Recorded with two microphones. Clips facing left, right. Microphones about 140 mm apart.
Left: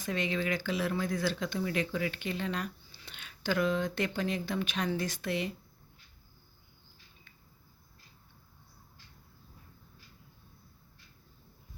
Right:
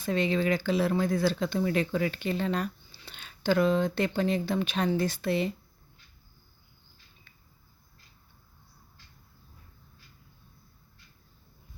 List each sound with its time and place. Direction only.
0.0 s speech: 30° right (ahead or behind)